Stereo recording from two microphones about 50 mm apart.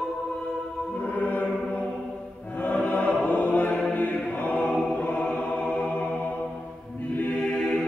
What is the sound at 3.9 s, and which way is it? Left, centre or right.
Choir, left.